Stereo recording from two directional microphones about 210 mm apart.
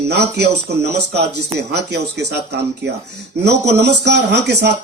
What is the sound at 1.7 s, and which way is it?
Speech, 50° right (ahead or behind).